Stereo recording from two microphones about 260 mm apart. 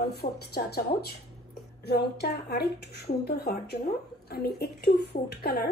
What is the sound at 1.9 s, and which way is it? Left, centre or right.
A woman's voice, left.